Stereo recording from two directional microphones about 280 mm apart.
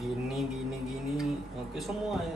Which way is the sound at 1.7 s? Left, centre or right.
Centre.